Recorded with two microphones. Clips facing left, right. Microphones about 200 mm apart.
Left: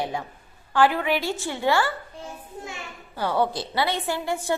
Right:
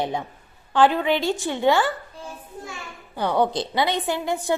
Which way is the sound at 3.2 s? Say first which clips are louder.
Right 3 dB; 15° right (ahead or behind).